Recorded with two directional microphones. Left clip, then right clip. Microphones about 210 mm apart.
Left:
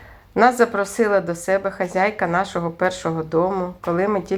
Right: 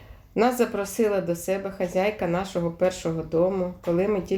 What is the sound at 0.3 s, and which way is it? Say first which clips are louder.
A woman's voice: left 7 dB; 20° left (ahead or behind).